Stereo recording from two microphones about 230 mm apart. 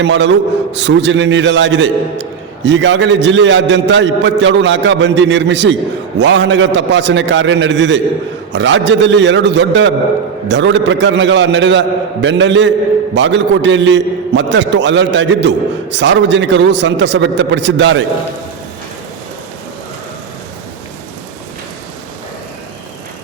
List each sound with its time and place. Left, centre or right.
0.0 s a man's voice: right